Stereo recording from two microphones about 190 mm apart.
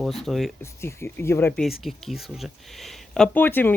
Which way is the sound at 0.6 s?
15° left (ahead or behind).